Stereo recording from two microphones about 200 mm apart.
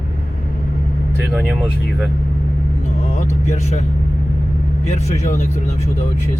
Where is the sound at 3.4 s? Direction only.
35° left (ahead or behind).